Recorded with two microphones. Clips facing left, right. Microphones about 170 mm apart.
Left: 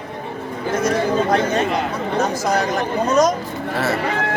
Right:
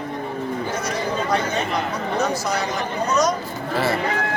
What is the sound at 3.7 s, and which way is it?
Speech, centre (ahead or behind).